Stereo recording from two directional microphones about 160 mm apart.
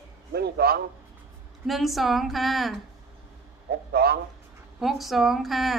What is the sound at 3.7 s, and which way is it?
Speech, 80° right.